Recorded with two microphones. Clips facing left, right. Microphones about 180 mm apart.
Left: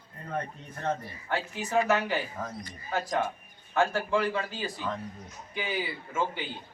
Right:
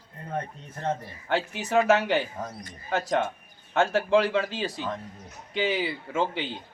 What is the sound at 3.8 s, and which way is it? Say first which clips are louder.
A man's voice: right 4 dB; 85° right.